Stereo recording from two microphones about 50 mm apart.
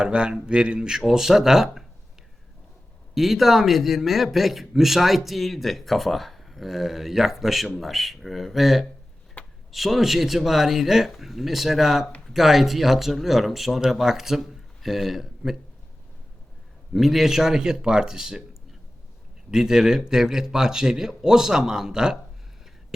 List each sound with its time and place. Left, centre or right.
0.0 s a man's voice: centre
3.2 s speech: centre
9.4 s a sound: left
9.7 s speech: centre
16.9 s a man's voice: centre
19.5 s a man's voice: centre